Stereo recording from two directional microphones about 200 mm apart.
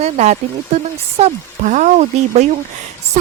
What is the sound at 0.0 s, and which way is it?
Speech, 35° right (ahead or behind).